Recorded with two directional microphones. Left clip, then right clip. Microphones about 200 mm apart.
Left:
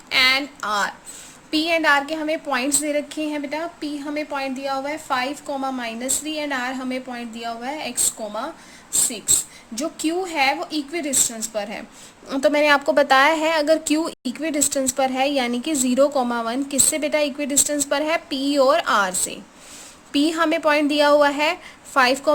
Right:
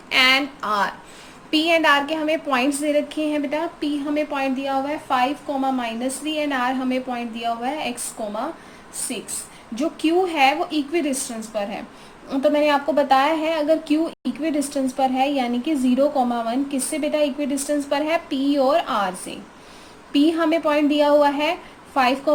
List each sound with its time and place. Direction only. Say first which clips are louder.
0.1 s a sound: right 1 dB; 20° left (ahead or behind)
1.5 s a woman's voice: right 1 dB; 20° left (ahead or behind)
9.7 s a woman's voice: right 4 dB; 25° left (ahead or behind)
12.3 s speech: left 1 dB; 45° left (ahead or behind)